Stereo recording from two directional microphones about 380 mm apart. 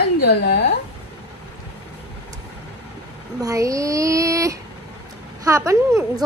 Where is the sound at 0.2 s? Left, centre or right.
Left.